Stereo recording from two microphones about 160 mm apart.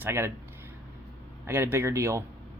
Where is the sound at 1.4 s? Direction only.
15° right (ahead or behind).